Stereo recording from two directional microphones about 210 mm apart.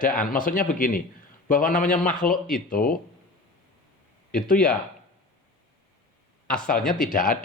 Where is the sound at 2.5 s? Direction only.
45° left (ahead or behind).